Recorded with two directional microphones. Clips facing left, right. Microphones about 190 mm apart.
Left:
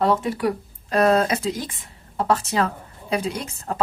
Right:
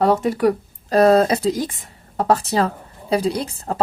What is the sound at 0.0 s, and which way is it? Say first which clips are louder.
Speech: right 4 dB; 40° right (ahead or behind).